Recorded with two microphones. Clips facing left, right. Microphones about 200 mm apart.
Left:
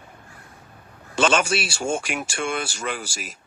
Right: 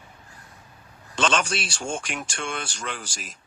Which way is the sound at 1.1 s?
5° left (ahead or behind).